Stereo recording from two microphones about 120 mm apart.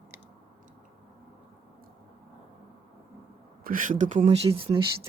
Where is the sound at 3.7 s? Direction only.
90° right.